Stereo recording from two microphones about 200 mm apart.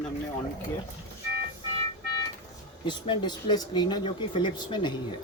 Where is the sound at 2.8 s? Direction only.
25° left (ahead or behind).